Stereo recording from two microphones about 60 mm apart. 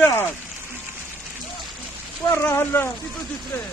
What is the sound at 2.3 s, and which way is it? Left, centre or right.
Speech, left.